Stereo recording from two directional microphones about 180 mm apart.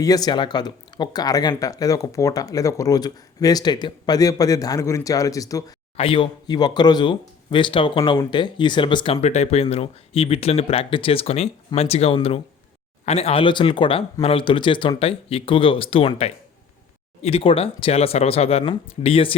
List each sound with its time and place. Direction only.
0.0 s speech: 20° left (ahead or behind)
6.0 s speech: 30° left (ahead or behind)
9.2 s speech: 40° left (ahead or behind)